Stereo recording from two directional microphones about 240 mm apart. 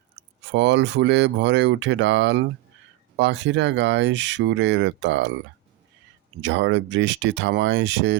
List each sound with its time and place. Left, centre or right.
0.5 s speech: right
6.4 s speech: right